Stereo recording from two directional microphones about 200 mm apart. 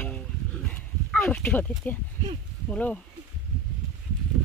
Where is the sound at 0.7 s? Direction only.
5° left (ahead or behind).